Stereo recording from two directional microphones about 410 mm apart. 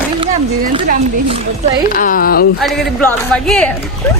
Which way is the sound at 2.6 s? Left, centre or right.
Centre.